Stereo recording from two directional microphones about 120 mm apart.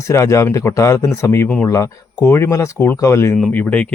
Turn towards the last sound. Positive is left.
turn(degrees=15)  # may be behind; listen again after turning